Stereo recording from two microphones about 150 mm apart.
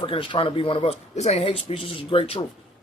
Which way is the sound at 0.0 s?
35° left (ahead or behind).